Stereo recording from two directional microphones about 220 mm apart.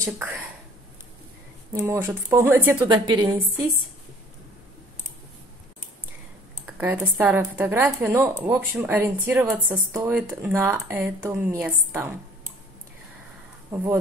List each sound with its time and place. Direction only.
0.0 s a woman's voice: 10° right (ahead or behind)
1.7 s a woman's voice: 10° right (ahead or behind)
2.9 s a woman's voice: 20° right (ahead or behind)
6.8 s a woman's voice: 10° right (ahead or behind)